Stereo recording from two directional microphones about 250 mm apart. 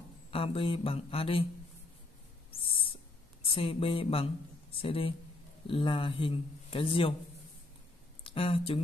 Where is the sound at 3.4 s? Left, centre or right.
Left.